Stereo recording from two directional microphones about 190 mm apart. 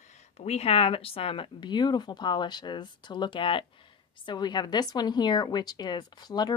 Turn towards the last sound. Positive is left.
turn(degrees=20)  # may be behind; listen again after turning